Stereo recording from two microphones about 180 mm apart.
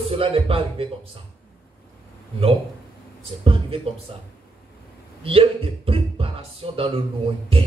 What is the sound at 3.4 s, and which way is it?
Speech, 30° right (ahead or behind).